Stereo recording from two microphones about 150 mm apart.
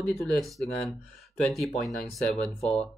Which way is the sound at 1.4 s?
Centre (ahead or behind).